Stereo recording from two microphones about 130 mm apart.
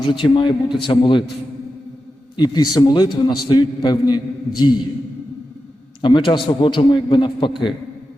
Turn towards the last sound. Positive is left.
turn(degrees=40)  # may be behind; listen again after turning